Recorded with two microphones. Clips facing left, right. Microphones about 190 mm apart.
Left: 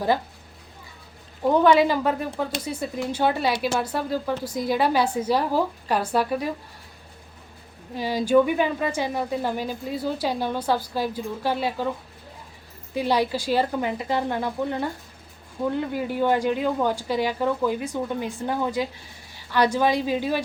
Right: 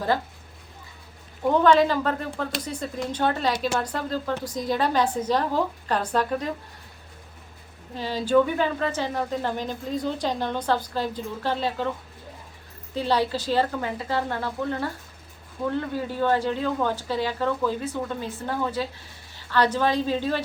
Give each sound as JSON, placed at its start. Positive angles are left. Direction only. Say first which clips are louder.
{"t": 1.5, "sound": "speech", "louder": "left 1 dB", "side_deg": 10}
{"t": 7.9, "sound": "a woman's voice", "louder": "left 2 dB", "side_deg": 10}